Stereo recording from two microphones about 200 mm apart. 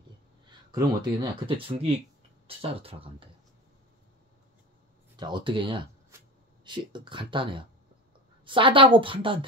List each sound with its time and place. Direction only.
0.5 s speech: 20° right (ahead or behind)
5.1 s speech: 25° right (ahead or behind)